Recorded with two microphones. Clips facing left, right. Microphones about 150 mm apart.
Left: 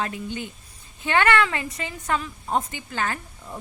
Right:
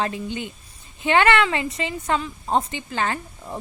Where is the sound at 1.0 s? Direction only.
20° right (ahead or behind).